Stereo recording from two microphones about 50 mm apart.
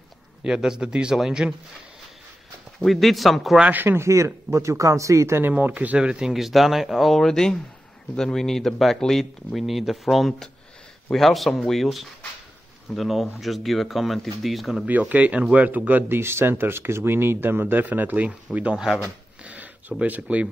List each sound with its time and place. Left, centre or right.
0.4 s speech: centre
2.8 s speech: centre
3.7 s speech: right
4.0 s speech: right
5.7 s speech: right
5.9 s speech: centre
6.3 s speech: centre
7.2 s speech: centre
14.9 s speech: right
16.1 s speech: right
19.4 s a sound: right
20.0 s speech: right